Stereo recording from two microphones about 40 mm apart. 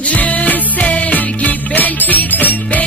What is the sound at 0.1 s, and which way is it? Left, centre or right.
Music, left.